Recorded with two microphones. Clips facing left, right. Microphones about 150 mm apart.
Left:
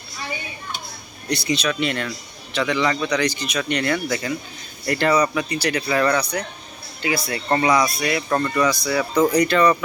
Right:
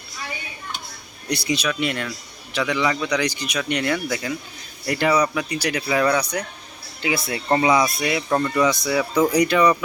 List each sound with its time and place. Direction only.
1.3 s speech: 10° right (ahead or behind)
8.6 s speech: 20° right (ahead or behind)
8.9 s speech: 10° right (ahead or behind)